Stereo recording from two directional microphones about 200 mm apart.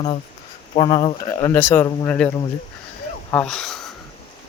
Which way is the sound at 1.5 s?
10° left (ahead or behind).